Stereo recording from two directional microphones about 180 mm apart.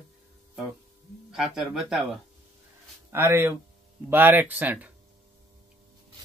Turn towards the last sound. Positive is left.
turn(degrees=-10)  # may be behind; listen again after turning